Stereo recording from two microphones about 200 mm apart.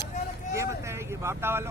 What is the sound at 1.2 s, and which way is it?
Speech, 10° right (ahead or behind).